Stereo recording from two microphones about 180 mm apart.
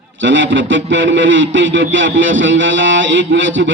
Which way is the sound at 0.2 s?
90° right.